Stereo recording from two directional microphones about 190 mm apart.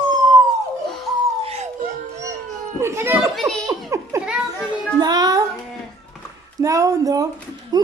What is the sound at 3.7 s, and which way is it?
Speech, 15° right (ahead or behind).